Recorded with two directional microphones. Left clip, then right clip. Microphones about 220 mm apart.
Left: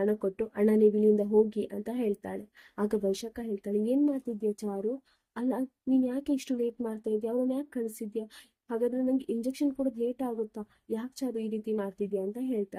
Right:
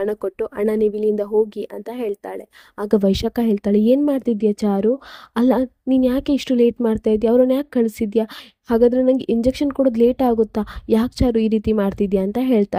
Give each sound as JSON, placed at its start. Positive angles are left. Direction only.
{"t": 0.0, "sound": "speech", "side_deg": -45}
{"t": 5.3, "sound": "speech", "side_deg": -40}